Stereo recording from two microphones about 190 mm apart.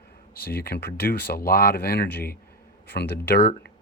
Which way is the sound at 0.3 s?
55° left (ahead or behind).